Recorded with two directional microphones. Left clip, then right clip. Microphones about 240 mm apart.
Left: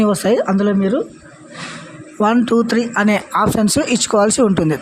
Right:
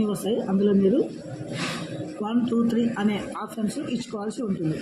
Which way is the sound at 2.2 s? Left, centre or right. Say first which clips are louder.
Left 12 dB; left.